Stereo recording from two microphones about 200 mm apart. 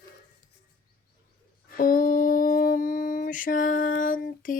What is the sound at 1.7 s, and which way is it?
Speech, 45° left (ahead or behind).